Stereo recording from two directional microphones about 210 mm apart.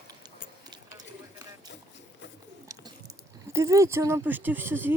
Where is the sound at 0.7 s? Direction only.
20° right (ahead or behind).